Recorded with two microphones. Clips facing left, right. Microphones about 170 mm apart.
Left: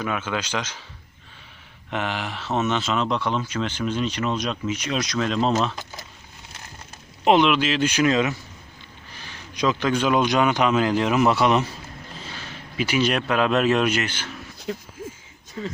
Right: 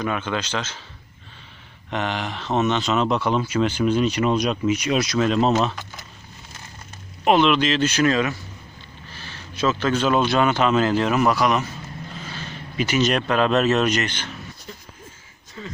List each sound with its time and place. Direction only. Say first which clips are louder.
0.0 s a man's voice: right 2 dB; 5° left (ahead or behind)
1.9 s speech: right 2 dB; 5° left (ahead or behind)
7.3 s a man's voice: even; 15° left (ahead or behind)
11.3 s a man's voice: left 1 dB; 30° left (ahead or behind)
12.7 s a man's voice: right 1 dB; 10° left (ahead or behind)
14.7 s speech: left 15 dB; 75° left (ahead or behind)